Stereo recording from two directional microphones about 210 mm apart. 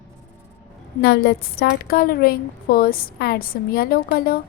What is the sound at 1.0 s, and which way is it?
A woman's voice, 50° left (ahead or behind).